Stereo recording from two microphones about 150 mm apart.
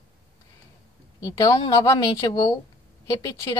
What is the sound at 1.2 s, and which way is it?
A woman's voice, 20° left (ahead or behind).